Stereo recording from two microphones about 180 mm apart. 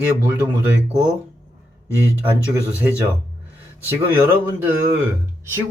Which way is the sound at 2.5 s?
15° right (ahead or behind).